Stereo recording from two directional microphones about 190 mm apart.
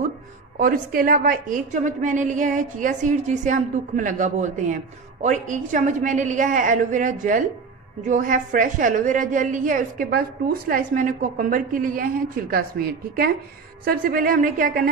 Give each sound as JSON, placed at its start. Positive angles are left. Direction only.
{"t": 0.6, "sound": "a woman's voice", "side_deg": -45}